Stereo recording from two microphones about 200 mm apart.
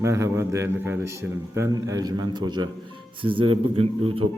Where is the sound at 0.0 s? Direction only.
15° right (ahead or behind).